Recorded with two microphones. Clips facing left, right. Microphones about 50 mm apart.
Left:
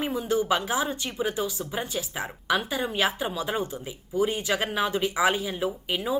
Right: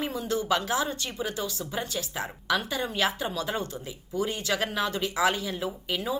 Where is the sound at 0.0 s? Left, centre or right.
Centre.